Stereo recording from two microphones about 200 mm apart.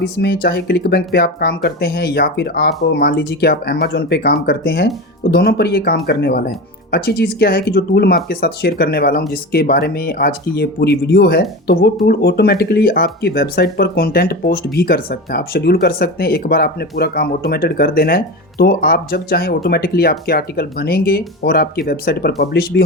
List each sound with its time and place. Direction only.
0.0 s speech: 55° left (ahead or behind)